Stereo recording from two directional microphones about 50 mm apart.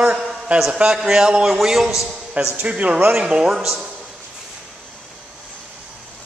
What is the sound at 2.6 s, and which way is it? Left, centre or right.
Speech, right.